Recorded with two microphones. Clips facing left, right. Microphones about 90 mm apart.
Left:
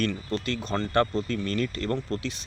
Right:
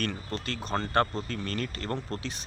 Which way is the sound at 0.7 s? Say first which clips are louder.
Left 2 dB; 35° right (ahead or behind).